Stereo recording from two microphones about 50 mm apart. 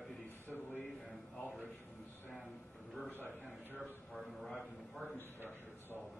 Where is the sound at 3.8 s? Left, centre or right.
Centre.